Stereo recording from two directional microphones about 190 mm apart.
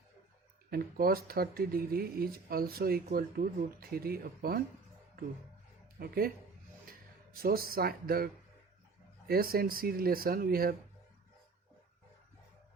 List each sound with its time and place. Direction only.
0.7 s speech: 50° right (ahead or behind)
6.0 s speech: 50° right (ahead or behind)
7.4 s speech: 50° right (ahead or behind)